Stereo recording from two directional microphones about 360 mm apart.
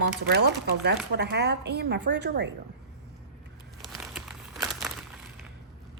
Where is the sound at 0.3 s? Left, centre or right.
Right.